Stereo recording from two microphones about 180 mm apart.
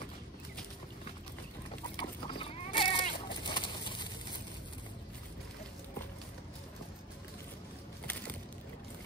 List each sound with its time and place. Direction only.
2.0 s sheep: 30° left (ahead or behind)
3.3 s bird: 25° left (ahead or behind)